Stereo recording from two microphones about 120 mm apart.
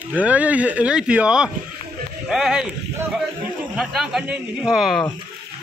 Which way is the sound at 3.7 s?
Centre (ahead or behind).